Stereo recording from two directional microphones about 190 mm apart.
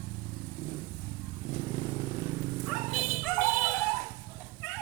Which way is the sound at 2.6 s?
Centre (ahead or behind).